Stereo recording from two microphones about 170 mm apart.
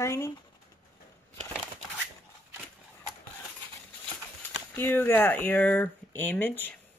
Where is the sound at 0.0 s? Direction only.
15° left (ahead or behind).